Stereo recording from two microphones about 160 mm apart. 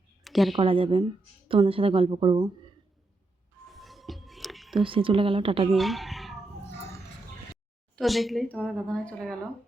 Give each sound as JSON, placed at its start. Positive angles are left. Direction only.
{"t": 0.3, "sound": "speech", "side_deg": 0}
{"t": 0.5, "sound": "a woman's voice", "side_deg": -35}
{"t": 3.7, "sound": "whispering", "side_deg": 0}
{"t": 4.8, "sound": "a woman's voice", "side_deg": -35}
{"t": 5.7, "sound": "a sound", "side_deg": 0}
{"t": 7.9, "sound": "a woman's voice", "side_deg": 0}